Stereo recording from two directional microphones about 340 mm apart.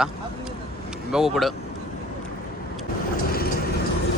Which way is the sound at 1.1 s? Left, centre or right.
Centre.